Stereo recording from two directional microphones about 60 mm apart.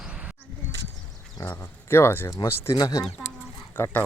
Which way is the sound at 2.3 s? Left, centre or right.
Left.